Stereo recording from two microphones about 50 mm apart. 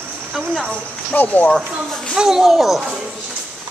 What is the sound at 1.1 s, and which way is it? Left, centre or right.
Speech, left.